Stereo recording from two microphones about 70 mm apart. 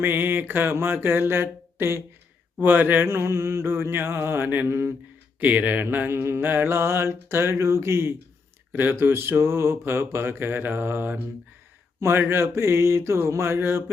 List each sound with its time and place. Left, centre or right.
0.0 s mantra: right
5.4 s mantra: right